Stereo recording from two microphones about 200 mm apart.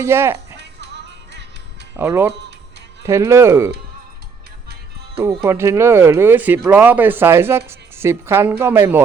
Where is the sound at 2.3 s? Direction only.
60° right (ahead or behind).